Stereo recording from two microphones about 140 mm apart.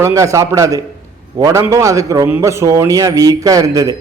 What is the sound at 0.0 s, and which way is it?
A man's voice, 20° right (ahead or behind).